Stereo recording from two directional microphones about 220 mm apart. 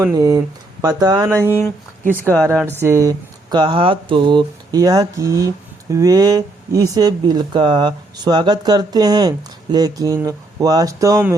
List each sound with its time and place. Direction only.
0.0 s speech: 15° right (ahead or behind)
1.5 s speech: 10° left (ahead or behind)
2.5 s speech: 10° right (ahead or behind)